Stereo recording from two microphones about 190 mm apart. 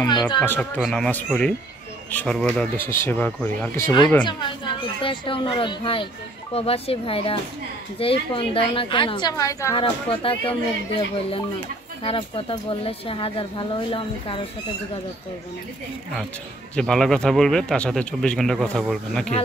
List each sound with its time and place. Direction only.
0.0 s speech: 20° left (ahead or behind)
0.4 s speech: 5° left (ahead or behind)
9.8 s speech: 30° left (ahead or behind)
12.0 s speech: 30° left (ahead or behind)
16.7 s speech: 5° left (ahead or behind)